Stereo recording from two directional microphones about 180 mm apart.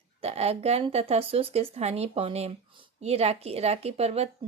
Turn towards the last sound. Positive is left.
turn(degrees=-35)  # may be behind; listen again after turning